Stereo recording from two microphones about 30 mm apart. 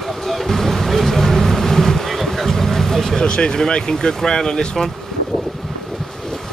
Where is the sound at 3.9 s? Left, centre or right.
Left.